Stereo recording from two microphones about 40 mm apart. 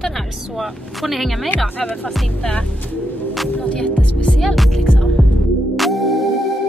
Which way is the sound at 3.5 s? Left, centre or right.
Left.